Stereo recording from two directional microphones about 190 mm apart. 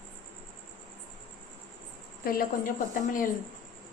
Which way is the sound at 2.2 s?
50° left (ahead or behind).